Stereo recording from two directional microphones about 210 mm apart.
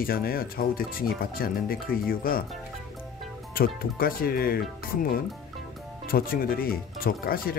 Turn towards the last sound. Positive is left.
turn(degrees=45)  # may be behind; listen again after turning